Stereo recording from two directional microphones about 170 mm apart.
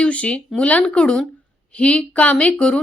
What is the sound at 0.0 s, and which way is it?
A woman's voice, 5° left (ahead or behind).